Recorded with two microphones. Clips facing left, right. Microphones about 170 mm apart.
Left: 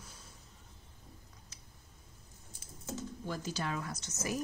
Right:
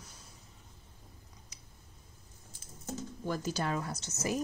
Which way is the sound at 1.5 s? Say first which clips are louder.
Right 1 dB; 15° right (ahead or behind).